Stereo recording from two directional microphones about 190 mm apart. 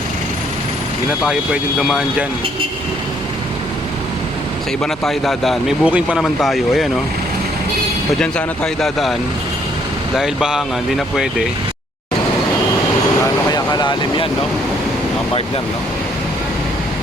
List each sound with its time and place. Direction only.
1.8 s speech: 5° right (ahead or behind)
4.8 s speech: centre (ahead or behind)
8.2 s speech: 5° left (ahead or behind)
10.2 s speech: 5° right (ahead or behind)
13.5 s vehicle: 20° left (ahead or behind)